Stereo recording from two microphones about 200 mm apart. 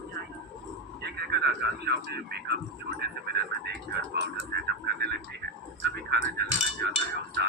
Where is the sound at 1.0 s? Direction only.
55° right (ahead or behind).